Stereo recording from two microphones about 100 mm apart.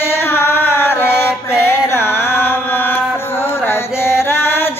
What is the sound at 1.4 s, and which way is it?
Mantra, 25° left (ahead or behind).